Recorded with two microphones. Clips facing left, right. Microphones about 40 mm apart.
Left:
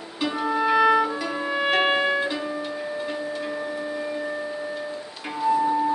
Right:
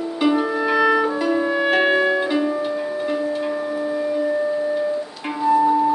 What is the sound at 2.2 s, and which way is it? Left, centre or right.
Music, centre.